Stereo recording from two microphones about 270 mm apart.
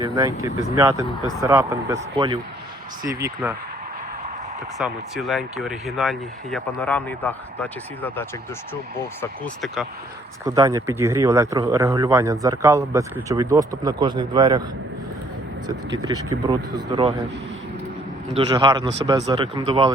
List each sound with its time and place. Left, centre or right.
0.0 s speech: centre
4.8 s speech: centre
10.4 s speech: centre
15.6 s speech: centre
18.3 s speech: centre